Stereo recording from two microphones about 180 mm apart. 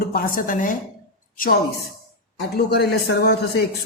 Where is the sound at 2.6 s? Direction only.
65° left (ahead or behind).